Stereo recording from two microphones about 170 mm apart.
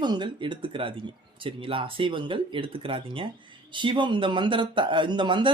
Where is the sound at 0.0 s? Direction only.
25° right (ahead or behind).